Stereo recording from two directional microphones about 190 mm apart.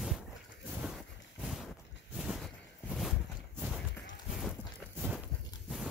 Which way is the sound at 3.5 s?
10° right (ahead or behind).